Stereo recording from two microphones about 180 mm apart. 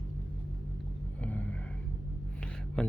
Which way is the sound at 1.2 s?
10° left (ahead or behind).